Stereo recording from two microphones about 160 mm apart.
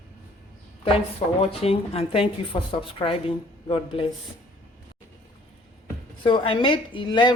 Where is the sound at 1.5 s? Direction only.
40° left (ahead or behind).